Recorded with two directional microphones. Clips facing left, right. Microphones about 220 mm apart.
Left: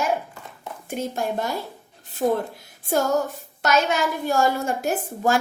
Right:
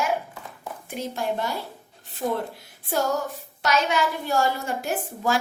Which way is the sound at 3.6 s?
45° left (ahead or behind).